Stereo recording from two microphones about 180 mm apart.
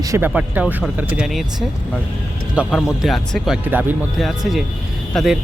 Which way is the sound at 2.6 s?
Centre (ahead or behind).